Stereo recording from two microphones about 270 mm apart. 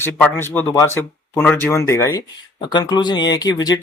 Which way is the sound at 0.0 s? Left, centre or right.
Centre.